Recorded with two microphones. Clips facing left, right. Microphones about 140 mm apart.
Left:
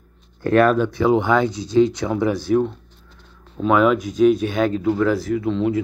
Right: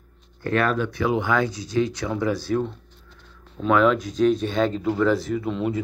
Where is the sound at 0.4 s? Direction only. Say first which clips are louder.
Left 7 dB; 50° left (ahead or behind).